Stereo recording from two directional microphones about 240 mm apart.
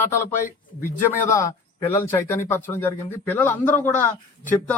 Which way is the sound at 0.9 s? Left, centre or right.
Centre.